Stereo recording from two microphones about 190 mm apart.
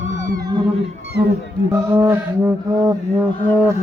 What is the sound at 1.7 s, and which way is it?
Mantra, 15° right (ahead or behind).